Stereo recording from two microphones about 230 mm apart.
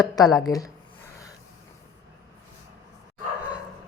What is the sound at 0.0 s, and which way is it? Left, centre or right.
Speech, centre.